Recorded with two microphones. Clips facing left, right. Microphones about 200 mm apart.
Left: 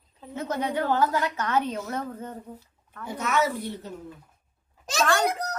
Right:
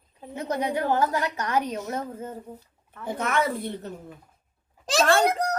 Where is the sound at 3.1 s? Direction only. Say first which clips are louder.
Even; 55° right (ahead or behind).